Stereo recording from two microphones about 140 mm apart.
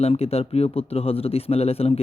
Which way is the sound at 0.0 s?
45° left (ahead or behind).